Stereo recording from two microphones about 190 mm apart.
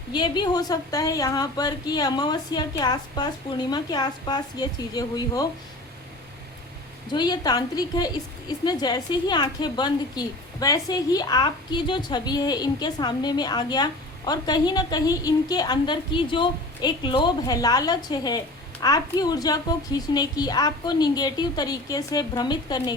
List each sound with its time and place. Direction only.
0.1 s a woman's voice: 25° left (ahead or behind)
7.1 s a woman's voice: 20° left (ahead or behind)